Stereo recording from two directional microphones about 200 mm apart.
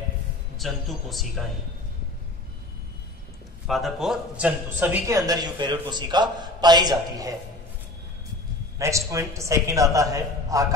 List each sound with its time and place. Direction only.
0.6 s a man's voice: centre (ahead or behind)
3.6 s speech: centre (ahead or behind); by 7.3 s 20° right (ahead or behind)
8.7 s speech: 15° right (ahead or behind)